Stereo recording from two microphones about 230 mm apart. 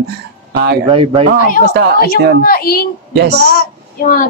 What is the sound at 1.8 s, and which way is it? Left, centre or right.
Speech, right.